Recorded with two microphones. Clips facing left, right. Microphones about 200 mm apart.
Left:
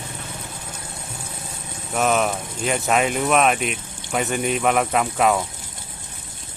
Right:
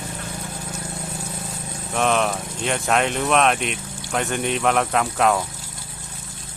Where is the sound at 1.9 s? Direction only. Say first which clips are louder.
Left 1 dB; 5° left (ahead or behind).